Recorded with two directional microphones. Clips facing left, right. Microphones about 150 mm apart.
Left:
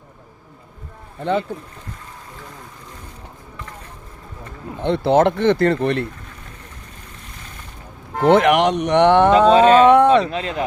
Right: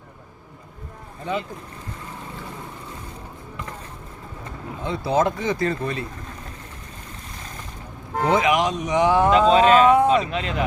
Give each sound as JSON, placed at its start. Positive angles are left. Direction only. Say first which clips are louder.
{"t": 4.8, "sound": "speech", "louder": "left 6 dB", "side_deg": 70}
{"t": 8.2, "sound": "speech", "louder": "left 6 dB", "side_deg": 70}
{"t": 9.5, "sound": "speech", "louder": "left 3 dB", "side_deg": 35}
{"t": 9.9, "sound": "speech", "louder": "left 5 dB", "side_deg": 75}
{"t": 10.2, "sound": "speech", "louder": "left 2 dB", "side_deg": 35}